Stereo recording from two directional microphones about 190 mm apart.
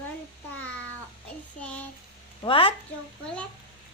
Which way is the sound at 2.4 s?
30° left (ahead or behind).